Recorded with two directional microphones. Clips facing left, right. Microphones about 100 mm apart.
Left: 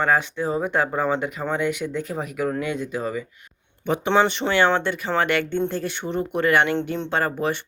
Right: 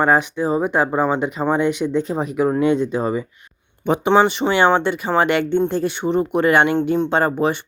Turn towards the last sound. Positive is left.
turn(degrees=-20)  # may be behind; listen again after turning